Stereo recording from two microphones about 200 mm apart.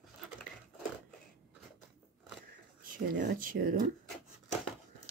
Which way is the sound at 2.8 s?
45° right (ahead or behind).